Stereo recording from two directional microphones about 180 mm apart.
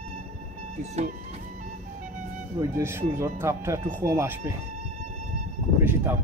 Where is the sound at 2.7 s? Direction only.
15° right (ahead or behind).